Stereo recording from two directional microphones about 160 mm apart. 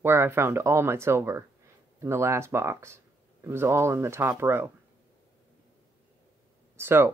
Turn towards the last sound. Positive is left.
turn(degrees=-15)  # may be behind; listen again after turning